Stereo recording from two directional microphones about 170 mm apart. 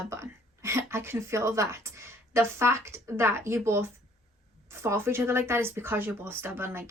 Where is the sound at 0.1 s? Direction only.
15° right (ahead or behind).